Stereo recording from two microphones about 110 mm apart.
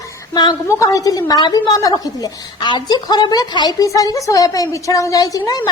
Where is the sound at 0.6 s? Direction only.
30° left (ahead or behind).